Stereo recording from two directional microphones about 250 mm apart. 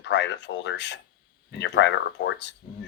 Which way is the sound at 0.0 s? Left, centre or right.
Left.